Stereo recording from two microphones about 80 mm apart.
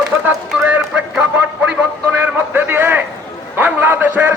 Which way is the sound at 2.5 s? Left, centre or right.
Right.